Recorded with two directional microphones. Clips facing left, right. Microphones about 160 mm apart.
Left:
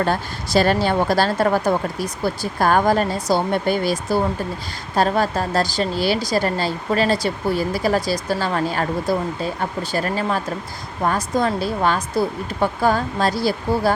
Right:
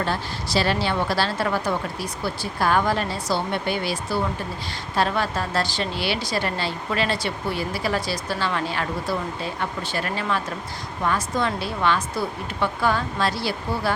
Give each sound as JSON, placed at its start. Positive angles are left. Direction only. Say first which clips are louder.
{"t": 0.0, "sound": "a woman's voice", "louder": "left 5 dB", "side_deg": 50}